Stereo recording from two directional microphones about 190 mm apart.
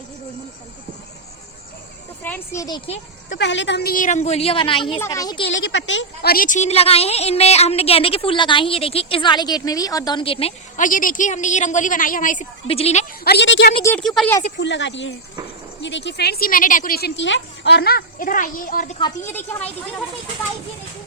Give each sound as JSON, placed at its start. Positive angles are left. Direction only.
{"t": 2.2, "sound": "a woman's voice", "side_deg": 10}
{"t": 3.3, "sound": "speech", "side_deg": 70}
{"t": 4.9, "sound": "a woman's voice", "side_deg": 15}
{"t": 5.5, "sound": "a woman's voice", "side_deg": 75}
{"t": 6.3, "sound": "a woman's voice", "side_deg": 45}
{"t": 10.8, "sound": "a woman's voice", "side_deg": 45}
{"t": 12.6, "sound": "speech", "side_deg": 30}
{"t": 13.2, "sound": "a woman's voice", "side_deg": 65}
{"t": 14.0, "sound": "speech", "side_deg": 0}
{"t": 14.4, "sound": "a woman's voice", "side_deg": 70}
{"t": 19.2, "sound": "a woman's voice", "side_deg": 10}